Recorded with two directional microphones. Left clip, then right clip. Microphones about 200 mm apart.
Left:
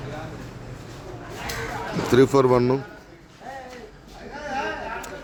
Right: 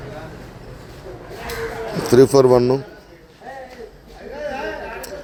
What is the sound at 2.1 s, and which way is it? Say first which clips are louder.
Speech: right 6 dB; 10° right (ahead or behind).